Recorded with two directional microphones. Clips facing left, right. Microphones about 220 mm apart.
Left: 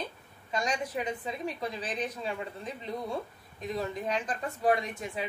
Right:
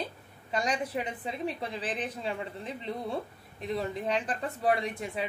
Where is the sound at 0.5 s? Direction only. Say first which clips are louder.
Right 1 dB; 30° right (ahead or behind).